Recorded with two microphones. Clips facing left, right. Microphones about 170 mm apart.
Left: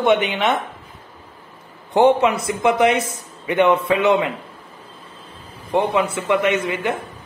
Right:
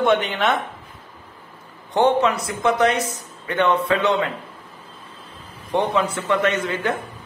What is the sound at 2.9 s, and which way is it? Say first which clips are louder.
Speech: left 2 dB; 55° left (ahead or behind).